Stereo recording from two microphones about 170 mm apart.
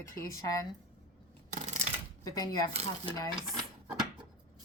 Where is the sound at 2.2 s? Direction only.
20° left (ahead or behind).